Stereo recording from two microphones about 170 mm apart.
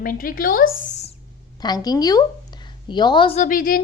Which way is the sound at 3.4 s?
55° left (ahead or behind).